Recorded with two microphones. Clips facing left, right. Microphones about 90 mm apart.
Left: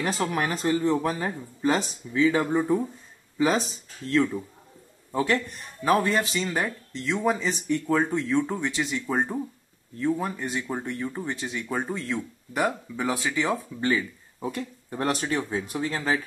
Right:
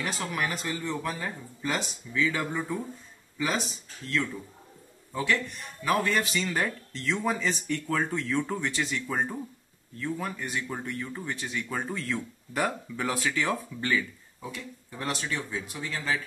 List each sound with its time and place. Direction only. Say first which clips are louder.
0.0 s speech: left 5 dB; 35° left (ahead or behind)
5.1 s speech: left 4 dB; 40° left (ahead or behind)
5.9 s speech: left 4 dB; 30° left (ahead or behind)
9.0 s speech: left 4 dB; 25° left (ahead or behind)
14.5 s speech: left 7 dB; 45° left (ahead or behind)